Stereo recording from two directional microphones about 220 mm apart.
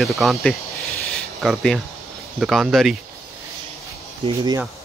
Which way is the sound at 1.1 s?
Centre (ahead or behind).